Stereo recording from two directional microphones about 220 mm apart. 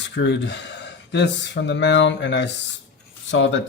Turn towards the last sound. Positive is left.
turn(degrees=55)  # may be behind; listen again after turning